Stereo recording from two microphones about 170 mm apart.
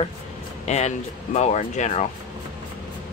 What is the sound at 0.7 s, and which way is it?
Speech, 40° left (ahead or behind).